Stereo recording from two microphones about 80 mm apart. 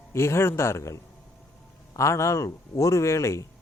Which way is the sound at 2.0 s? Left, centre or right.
Left.